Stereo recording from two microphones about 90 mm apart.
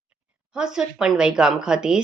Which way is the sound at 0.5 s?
10° right (ahead or behind).